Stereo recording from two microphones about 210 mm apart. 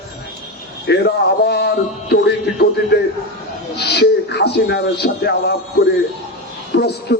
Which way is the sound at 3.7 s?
50° left (ahead or behind).